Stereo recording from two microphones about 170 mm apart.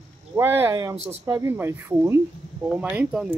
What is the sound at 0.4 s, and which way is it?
Speech, 10° right (ahead or behind).